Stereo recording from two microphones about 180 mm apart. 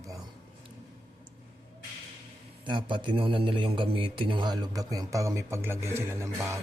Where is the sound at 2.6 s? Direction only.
25° right (ahead or behind).